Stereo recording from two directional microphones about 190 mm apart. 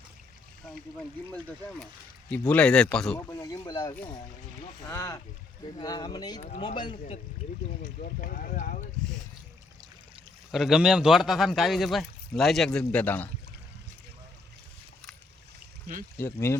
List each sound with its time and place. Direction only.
2.3 s speech: 5° left (ahead or behind)
3.2 s speech: 15° left (ahead or behind)
7.8 s speech: 45° left (ahead or behind)
10.5 s speech: centre (ahead or behind)
16.1 s speech: 15° left (ahead or behind)